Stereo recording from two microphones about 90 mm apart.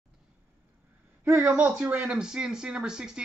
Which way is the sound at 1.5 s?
15° right (ahead or behind).